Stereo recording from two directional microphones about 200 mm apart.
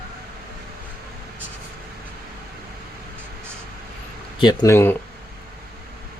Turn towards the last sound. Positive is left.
turn(degrees=10)  # may be behind; listen again after turning